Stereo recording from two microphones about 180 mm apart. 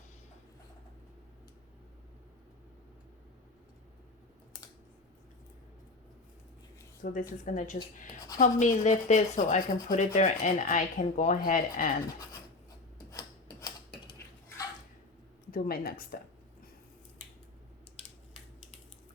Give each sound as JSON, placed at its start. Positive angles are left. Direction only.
{"t": 7.0, "sound": "speech", "side_deg": 50}
{"t": 13.1, "sound": "a sound", "side_deg": 20}
{"t": 15.5, "sound": "speech", "side_deg": 55}